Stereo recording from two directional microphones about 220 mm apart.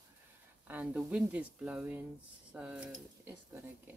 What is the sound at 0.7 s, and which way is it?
Speech, 5° right (ahead or behind).